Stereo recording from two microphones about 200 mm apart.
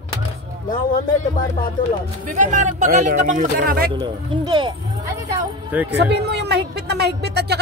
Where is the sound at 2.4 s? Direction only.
40° right (ahead or behind).